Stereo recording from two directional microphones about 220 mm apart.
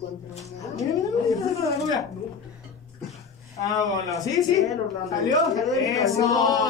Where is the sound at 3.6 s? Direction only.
15° left (ahead or behind).